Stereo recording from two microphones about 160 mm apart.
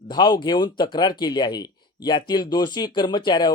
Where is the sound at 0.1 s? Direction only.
25° left (ahead or behind).